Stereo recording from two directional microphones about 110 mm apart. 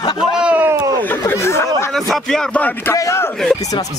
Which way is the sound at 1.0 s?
20° left (ahead or behind).